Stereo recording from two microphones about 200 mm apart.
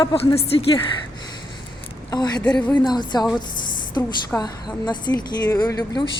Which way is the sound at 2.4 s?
5° left (ahead or behind).